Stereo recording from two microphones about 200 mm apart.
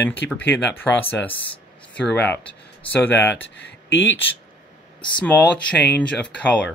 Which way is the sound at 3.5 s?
70° left (ahead or behind).